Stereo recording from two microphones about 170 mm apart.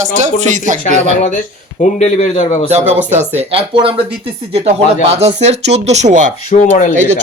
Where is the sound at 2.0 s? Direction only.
40° left (ahead or behind).